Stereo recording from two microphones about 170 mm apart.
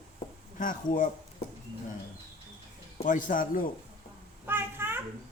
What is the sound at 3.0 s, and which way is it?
Speech, 50° left (ahead or behind).